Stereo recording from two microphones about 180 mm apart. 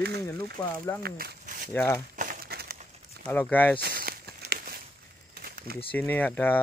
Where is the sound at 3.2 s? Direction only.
10° left (ahead or behind).